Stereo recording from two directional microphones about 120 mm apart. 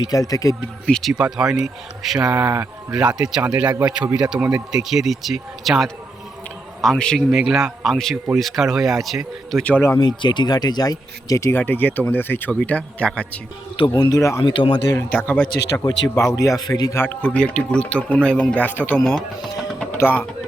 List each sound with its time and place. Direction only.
0.1 s speech: 30° left (ahead or behind)
0.9 s speech: 5° left (ahead or behind)
1.2 s speech: 5° right (ahead or behind)
10.0 s speech: 35° left (ahead or behind); by 13.4 s 10° left (ahead or behind)
13.7 s speech: 40° left (ahead or behind); by 14.4 s 25° left (ahead or behind)
14.4 s speech: 40° left (ahead or behind)
14.9 s speech: 10° left (ahead or behind)
16.3 s speech: 30° left (ahead or behind)
16.9 s speech: 15° left (ahead or behind)